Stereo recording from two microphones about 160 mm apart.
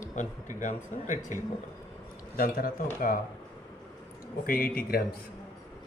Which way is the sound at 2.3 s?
65° left (ahead or behind).